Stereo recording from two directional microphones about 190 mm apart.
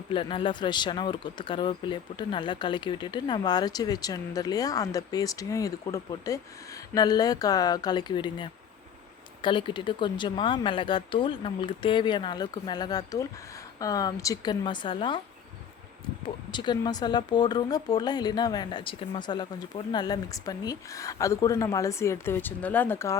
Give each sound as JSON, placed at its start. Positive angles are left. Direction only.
{"t": 0.1, "sound": "speech", "side_deg": 25}
{"t": 16.2, "sound": "speech", "side_deg": 25}